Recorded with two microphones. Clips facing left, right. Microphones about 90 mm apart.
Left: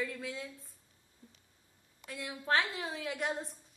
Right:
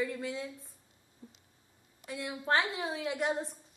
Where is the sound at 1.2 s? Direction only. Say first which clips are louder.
Right 7 dB; 25° right (ahead or behind).